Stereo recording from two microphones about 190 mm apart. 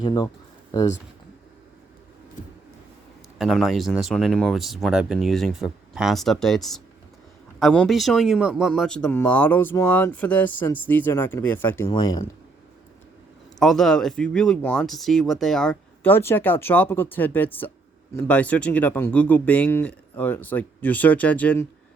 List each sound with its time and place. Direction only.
0.0 s speech: 20° left (ahead or behind)
3.3 s speech: centre (ahead or behind); by 12.2 s 20° left (ahead or behind)
13.6 s speech: centre (ahead or behind)